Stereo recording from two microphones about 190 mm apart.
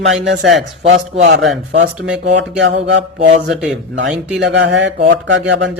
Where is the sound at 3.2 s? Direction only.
35° right (ahead or behind).